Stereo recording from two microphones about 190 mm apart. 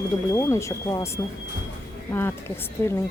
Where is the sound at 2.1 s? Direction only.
10° left (ahead or behind).